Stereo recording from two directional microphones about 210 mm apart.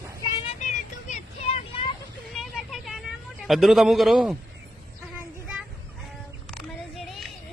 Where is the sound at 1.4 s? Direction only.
30° left (ahead or behind).